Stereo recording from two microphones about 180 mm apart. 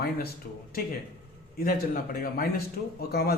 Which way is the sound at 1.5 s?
55° left (ahead or behind).